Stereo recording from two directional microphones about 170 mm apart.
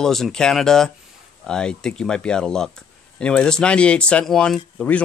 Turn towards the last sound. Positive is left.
turn(degrees=5)  # may be behind; listen again after turning